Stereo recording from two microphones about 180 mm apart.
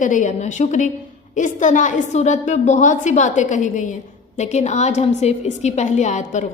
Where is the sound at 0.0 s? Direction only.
45° left (ahead or behind).